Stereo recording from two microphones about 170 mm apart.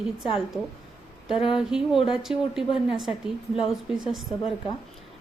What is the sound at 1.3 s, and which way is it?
Speech, 30° left (ahead or behind).